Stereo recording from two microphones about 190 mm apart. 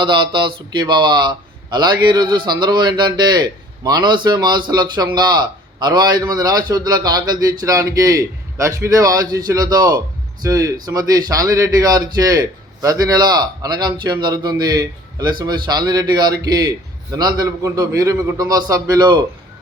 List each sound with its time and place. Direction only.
0.0 s a man's voice: 25° right (ahead or behind)